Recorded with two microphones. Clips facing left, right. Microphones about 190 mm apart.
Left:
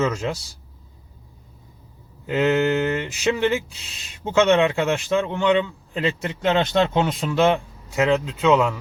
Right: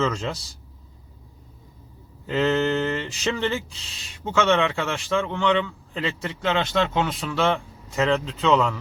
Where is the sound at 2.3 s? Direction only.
15° left (ahead or behind).